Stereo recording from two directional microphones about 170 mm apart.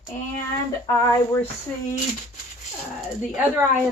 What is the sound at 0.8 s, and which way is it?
Speech, 20° left (ahead or behind).